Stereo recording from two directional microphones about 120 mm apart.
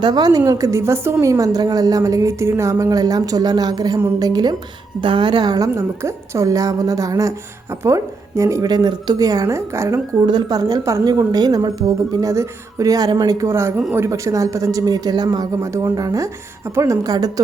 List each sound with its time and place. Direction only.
0.0 s a woman's voice: 35° right (ahead or behind)
10.2 s a woman's voice: 35° right (ahead or behind)
13.4 s a woman's voice: 20° right (ahead or behind)